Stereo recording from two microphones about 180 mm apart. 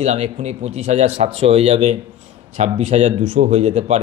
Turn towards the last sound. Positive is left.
turn(degrees=-35)  # may be behind; listen again after turning